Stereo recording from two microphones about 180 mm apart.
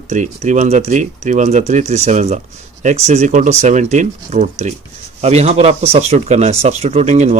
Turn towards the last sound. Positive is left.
turn(degrees=-40)  # may be behind; listen again after turning